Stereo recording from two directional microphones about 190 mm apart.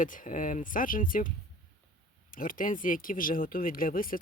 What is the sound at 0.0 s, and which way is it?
Speech, 45° left (ahead or behind).